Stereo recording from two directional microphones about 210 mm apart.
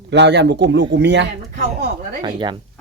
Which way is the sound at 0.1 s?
55° right (ahead or behind).